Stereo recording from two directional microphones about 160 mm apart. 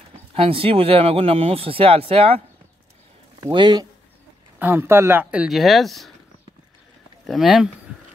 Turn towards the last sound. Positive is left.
turn(degrees=0)  # may be behind; listen again after turning